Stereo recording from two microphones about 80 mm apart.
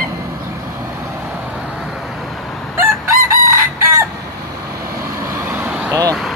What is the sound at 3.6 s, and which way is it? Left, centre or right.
Chicken, right.